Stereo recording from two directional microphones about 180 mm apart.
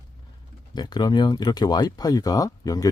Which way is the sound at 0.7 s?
25° left (ahead or behind).